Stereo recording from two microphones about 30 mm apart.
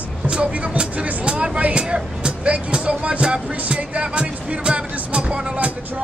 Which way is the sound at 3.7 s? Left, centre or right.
Right.